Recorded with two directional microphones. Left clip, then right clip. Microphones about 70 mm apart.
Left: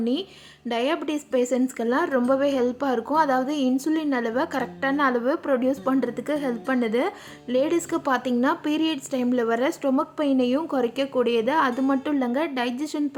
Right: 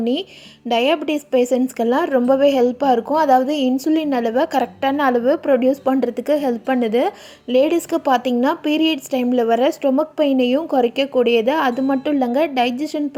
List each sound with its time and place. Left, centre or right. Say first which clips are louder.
0.0 s a woman's voice: right 5 dB; right
0.9 s a woman's voice: right 7 dB; right
7.5 s speech: right 7 dB; right
7.8 s a woman's voice: right 7 dB; right